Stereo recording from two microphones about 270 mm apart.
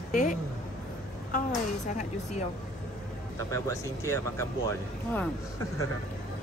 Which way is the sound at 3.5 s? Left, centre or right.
Centre.